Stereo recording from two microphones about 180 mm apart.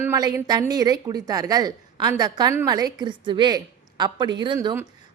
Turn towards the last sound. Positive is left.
turn(degrees=-25)  # may be behind; listen again after turning